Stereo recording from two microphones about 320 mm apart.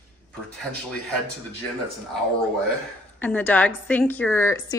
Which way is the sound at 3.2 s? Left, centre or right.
Centre.